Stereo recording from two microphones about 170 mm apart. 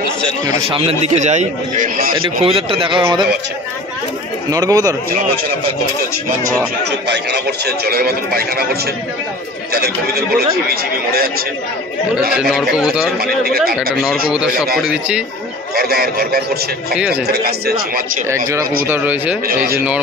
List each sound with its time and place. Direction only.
0.7 s a man's voice: 35° right (ahead or behind); by 2.1 s 50° right (ahead or behind)
2.2 s a man's voice: 35° right (ahead or behind)
4.5 s speech: 20° right (ahead or behind)
7.1 s a man's voice: 75° right (ahead or behind)
9.7 s a man's voice: 65° right (ahead or behind)
12.4 s a man's voice: 5° right (ahead or behind)
13.2 s a man's voice: 60° right (ahead or behind)
14.8 s a man's voice: 5° right (ahead or behind)
15.7 s a man's voice: 65° right (ahead or behind)
18.9 s a man's voice: 10° right (ahead or behind)